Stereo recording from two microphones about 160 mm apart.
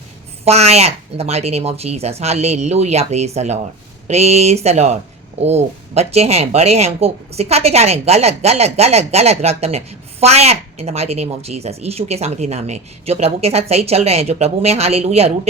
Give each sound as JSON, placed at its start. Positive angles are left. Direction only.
{"t": 0.4, "sound": "speech", "side_deg": -40}